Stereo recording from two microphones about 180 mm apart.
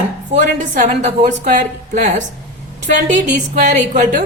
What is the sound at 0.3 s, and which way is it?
A woman's voice, 40° right (ahead or behind).